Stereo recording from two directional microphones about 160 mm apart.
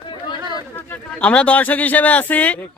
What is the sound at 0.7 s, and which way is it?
Speech, 10° left (ahead or behind).